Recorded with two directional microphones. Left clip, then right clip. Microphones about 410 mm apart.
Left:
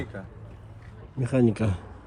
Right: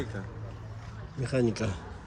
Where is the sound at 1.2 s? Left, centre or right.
Centre.